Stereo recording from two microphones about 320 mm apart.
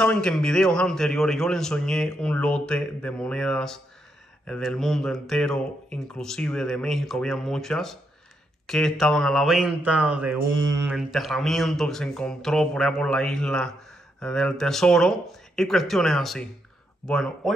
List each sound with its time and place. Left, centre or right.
0.0 s speech: centre
10.3 s mantra: right
10.9 s speech: centre